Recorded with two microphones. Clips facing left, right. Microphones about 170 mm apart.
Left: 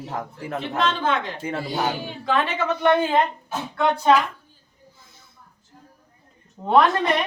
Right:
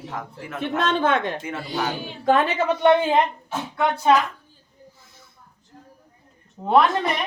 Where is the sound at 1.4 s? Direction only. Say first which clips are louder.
Left 2 dB; 30° left (ahead or behind).